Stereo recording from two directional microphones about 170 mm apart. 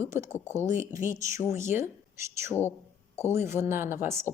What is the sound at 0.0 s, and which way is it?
Speech, 15° right (ahead or behind).